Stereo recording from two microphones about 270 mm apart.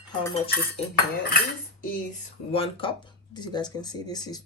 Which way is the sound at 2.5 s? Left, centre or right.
Centre.